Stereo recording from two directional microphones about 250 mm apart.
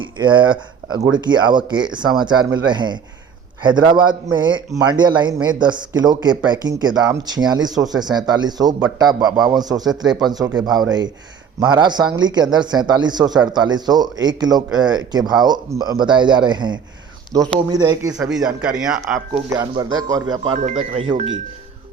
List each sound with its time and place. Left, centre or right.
0.0 s a man's voice: centre
11.6 s a man's voice: centre
18.3 s speech: centre
19.5 s a man's voice: centre